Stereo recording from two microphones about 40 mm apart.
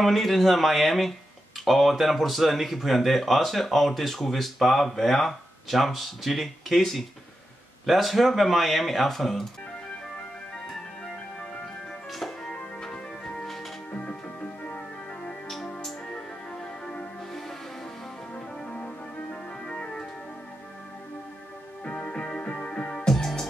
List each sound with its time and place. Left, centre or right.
0.0 s speech: centre
12.1 s music: centre
13.9 s music: left
16.1 s music: centre
18.3 s music: left
21.8 s music: left